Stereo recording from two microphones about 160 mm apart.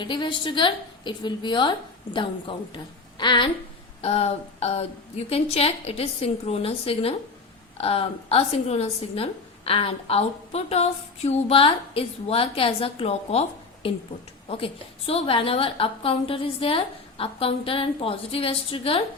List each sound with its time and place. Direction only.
0.0 s a woman's voice: 30° left (ahead or behind)
14.4 s a woman's voice: 35° left (ahead or behind)